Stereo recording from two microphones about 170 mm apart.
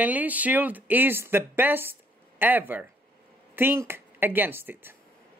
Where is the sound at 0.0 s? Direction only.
10° right (ahead or behind).